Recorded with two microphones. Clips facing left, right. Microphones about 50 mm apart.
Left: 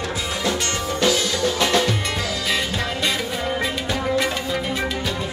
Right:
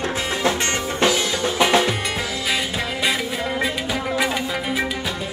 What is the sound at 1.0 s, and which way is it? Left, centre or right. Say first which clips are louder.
Music: even; right.